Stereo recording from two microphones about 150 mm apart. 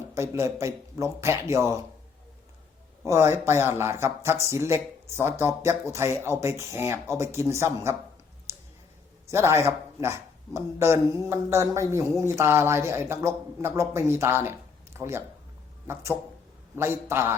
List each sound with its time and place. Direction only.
0.1 s speech: 20° right (ahead or behind)
3.0 s speech: 15° right (ahead or behind)
8.5 s clicking: 15° right (ahead or behind)
9.2 s speech: 20° right (ahead or behind)
16.7 s speech: 15° right (ahead or behind)